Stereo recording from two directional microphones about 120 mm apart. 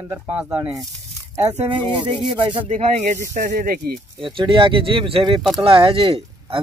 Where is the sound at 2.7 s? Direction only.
90° right.